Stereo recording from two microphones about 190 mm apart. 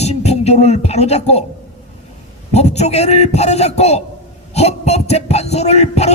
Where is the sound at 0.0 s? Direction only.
35° left (ahead or behind).